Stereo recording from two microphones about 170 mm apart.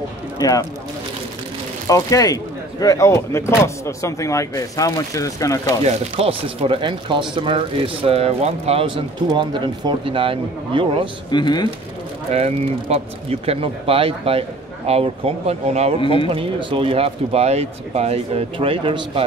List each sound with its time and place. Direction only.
0.4 s speech: 20° left (ahead or behind)
1.9 s speech: 20° left (ahead or behind)
5.9 s speech: 35° right (ahead or behind)
11.2 s speech: 25° left (ahead or behind)
12.3 s speech: 40° right (ahead or behind)
16.0 s speech: 30° left (ahead or behind)
16.3 s speech: 30° right (ahead or behind)